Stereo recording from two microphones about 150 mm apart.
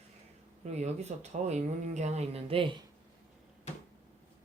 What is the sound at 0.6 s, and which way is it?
Speech, 50° right (ahead or behind).